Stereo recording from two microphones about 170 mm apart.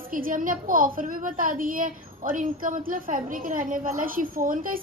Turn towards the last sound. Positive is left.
turn(degrees=-55)  # may be behind; listen again after turning